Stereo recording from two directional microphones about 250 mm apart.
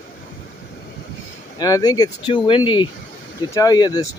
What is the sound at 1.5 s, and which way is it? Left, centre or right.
Speech, centre.